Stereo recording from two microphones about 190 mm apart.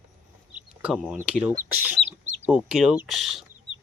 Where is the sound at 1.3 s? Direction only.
5° right (ahead or behind).